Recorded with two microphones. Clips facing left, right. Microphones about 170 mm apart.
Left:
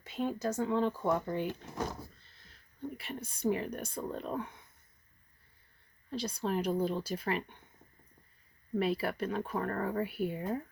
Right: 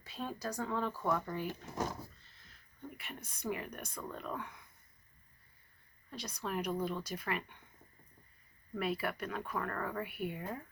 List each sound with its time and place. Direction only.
0.0 s speech: 20° left (ahead or behind)
3.0 s speech: 30° left (ahead or behind)
6.1 s speech: 30° left (ahead or behind)
8.7 s speech: 30° left (ahead or behind)